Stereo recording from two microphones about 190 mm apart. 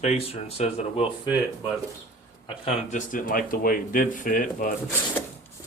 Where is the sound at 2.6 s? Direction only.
40° left (ahead or behind).